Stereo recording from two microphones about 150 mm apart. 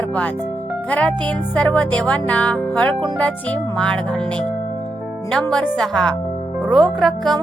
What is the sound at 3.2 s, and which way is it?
Speech, 10° left (ahead or behind).